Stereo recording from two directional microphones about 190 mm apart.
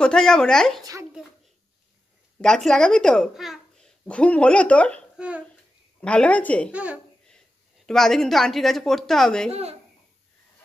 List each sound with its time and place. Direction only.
0.0 s a child's voice: 5° left (ahead or behind)
2.4 s a child's voice: 5° left (ahead or behind)
5.1 s hiccup: 5° right (ahead or behind)
5.9 s a woman's voice: 5° left (ahead or behind)
6.7 s a child's voice: 5° right (ahead or behind)
9.5 s a child's voice: 35° right (ahead or behind)